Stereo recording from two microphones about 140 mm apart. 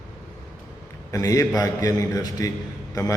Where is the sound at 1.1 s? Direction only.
25° left (ahead or behind).